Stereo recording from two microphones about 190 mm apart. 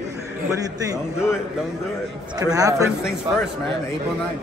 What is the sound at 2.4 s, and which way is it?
Speech, 20° right (ahead or behind).